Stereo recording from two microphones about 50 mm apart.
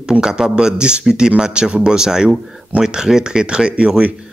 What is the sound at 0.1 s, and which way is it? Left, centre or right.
Speech, centre.